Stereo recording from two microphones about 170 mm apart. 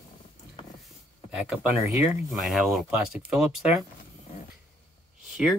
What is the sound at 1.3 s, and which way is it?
Speech, 5° right (ahead or behind).